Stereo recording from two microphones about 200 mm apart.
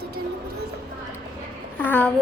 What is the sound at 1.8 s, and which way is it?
Speech, 10° left (ahead or behind).